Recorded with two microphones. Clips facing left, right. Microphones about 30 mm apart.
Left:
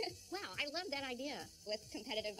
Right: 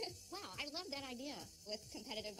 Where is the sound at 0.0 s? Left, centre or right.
Left.